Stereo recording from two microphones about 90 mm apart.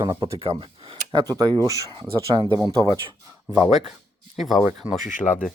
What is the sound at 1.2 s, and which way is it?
Speech, 45° right (ahead or behind).